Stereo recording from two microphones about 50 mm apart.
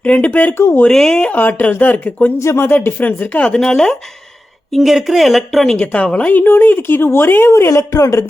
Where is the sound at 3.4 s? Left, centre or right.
Centre.